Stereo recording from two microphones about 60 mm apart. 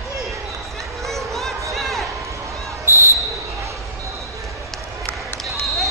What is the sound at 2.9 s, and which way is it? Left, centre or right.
Basketball bounce, right.